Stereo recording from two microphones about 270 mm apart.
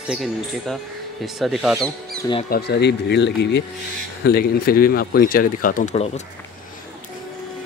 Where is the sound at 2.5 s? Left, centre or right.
Left.